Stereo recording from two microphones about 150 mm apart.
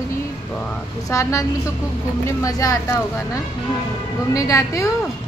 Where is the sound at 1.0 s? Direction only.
20° left (ahead or behind).